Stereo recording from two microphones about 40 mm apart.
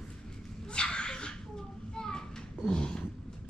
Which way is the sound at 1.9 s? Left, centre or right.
Centre.